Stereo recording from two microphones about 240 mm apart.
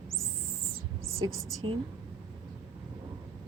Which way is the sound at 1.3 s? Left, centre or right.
Right.